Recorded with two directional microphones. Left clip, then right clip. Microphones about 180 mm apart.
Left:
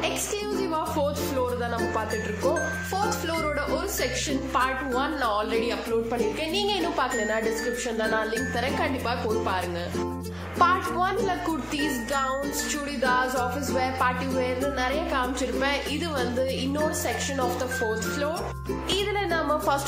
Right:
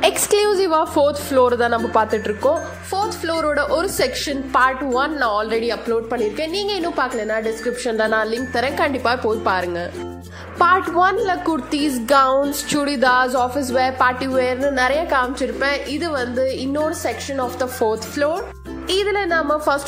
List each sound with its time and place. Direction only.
0.0 s speech: 50° right (ahead or behind)
2.9 s a woman's voice: 35° right (ahead or behind)
7.8 s a woman's voice: 40° right (ahead or behind)
15.6 s a woman's voice: 30° right (ahead or behind)